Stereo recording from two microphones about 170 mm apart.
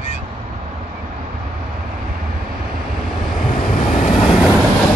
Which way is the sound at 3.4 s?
45° left (ahead or behind).